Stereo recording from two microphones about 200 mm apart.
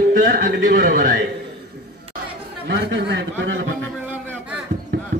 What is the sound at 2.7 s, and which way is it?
A man's voice, 60° right (ahead or behind).